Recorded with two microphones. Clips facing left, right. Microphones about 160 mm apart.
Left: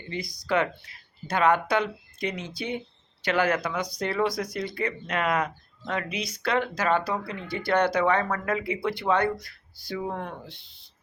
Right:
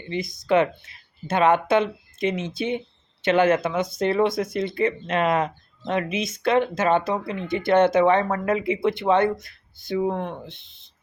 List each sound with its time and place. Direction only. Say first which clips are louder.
0.1 s speech: right 6 dB; 20° right (ahead or behind)